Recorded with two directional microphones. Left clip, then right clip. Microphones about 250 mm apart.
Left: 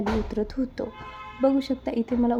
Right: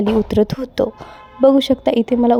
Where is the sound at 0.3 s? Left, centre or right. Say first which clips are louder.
Right 11 dB; right.